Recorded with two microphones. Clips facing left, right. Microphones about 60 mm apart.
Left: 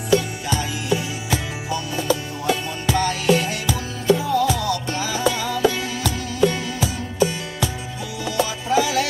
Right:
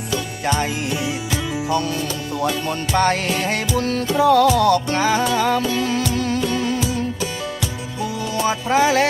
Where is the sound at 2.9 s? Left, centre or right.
Right.